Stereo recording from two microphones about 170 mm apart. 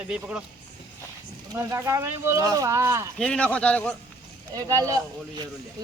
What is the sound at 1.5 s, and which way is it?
Speech, 20° right (ahead or behind).